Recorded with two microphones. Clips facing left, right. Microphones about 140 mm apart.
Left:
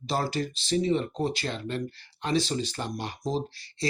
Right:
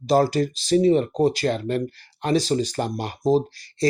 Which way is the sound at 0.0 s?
40° right (ahead or behind).